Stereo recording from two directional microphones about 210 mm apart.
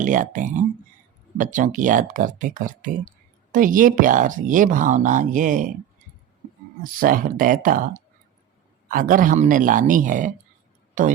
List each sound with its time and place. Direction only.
0.0 s speech: 40° right (ahead or behind)
6.8 s speech: 40° right (ahead or behind)